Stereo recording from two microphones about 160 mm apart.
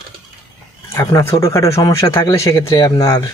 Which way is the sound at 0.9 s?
20° left (ahead or behind).